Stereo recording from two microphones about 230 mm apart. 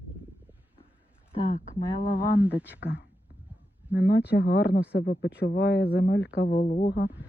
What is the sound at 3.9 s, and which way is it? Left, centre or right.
Speech, left.